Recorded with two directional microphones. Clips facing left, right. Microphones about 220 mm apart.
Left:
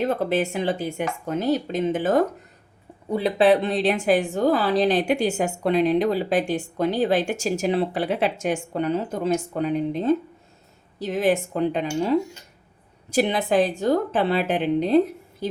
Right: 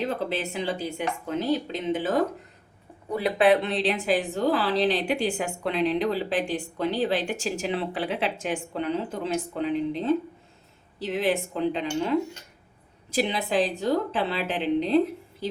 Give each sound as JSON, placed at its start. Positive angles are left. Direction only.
{"t": 0.0, "sound": "a woman's voice", "side_deg": 50}
{"t": 3.1, "sound": "speech", "side_deg": 30}
{"t": 3.8, "sound": "a woman's voice", "side_deg": 50}